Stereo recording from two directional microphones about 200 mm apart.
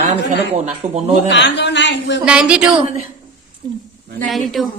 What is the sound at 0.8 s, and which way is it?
Speech, 40° right (ahead or behind).